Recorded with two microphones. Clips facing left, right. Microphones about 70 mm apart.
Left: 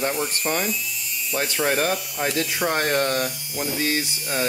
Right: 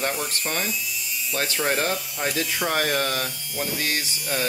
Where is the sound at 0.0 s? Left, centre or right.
Centre.